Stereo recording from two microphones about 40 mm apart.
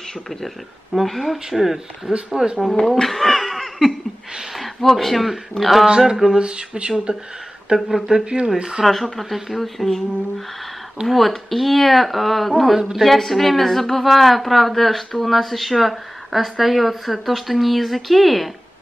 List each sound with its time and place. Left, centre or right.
1.0 s a woman's voice: centre
2.3 s a sound: centre
3.0 s laughter: centre
4.6 s a woman's voice: centre
5.9 s a sound: centre
6.4 s speech: right
8.8 s a woman's voice: centre
11.1 s a woman's voice: centre